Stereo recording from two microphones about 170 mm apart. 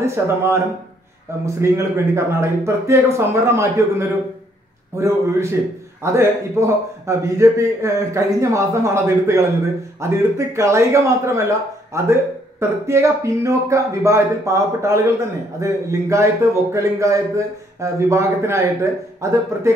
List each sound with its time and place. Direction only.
0.0 s speech: 15° right (ahead or behind)
4.9 s speech: 15° right (ahead or behind)